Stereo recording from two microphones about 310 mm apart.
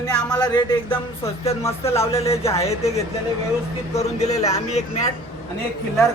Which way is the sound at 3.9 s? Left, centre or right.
Left.